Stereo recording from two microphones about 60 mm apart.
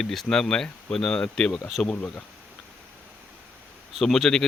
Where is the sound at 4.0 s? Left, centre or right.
Centre.